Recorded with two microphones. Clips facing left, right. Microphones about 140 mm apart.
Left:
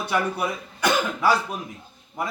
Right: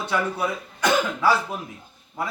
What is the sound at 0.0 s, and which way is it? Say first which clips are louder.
A man's voice: even; 10° left (ahead or behind).